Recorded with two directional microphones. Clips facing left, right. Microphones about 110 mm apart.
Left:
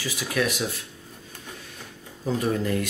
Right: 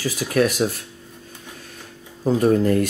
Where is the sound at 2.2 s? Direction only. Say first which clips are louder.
Right 8 dB; 40° right (ahead or behind).